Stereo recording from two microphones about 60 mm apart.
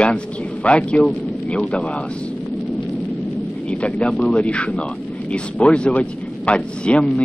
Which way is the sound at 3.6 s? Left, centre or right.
Centre.